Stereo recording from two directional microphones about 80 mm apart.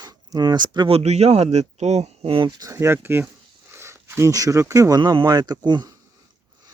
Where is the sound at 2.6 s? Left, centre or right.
Right.